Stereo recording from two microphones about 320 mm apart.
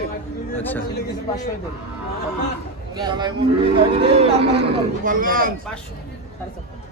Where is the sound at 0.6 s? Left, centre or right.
Centre.